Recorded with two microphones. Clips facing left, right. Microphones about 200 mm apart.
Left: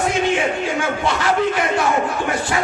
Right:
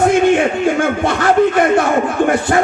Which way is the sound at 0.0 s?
55° right (ahead or behind).